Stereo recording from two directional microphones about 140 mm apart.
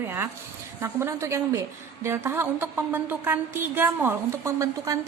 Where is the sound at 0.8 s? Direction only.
20° right (ahead or behind).